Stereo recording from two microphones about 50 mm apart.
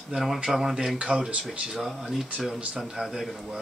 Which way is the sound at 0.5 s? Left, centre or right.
Centre.